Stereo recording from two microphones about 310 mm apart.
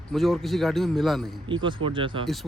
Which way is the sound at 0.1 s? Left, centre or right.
Centre.